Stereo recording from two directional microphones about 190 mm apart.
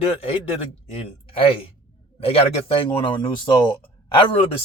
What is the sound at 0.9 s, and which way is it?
Speech, 30° left (ahead or behind).